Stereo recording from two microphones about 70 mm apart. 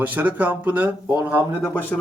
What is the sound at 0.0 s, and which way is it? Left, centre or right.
Speech, right.